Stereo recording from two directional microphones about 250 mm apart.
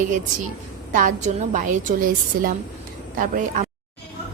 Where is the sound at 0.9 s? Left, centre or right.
Right.